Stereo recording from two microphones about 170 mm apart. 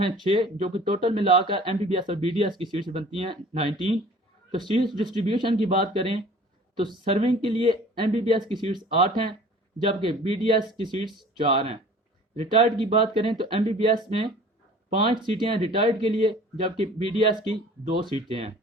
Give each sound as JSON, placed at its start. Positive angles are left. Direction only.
{"t": 0.0, "sound": "speech", "side_deg": -30}
{"t": 5.0, "sound": "speech", "side_deg": -30}